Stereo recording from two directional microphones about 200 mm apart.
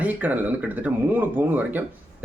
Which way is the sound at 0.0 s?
10° right (ahead or behind).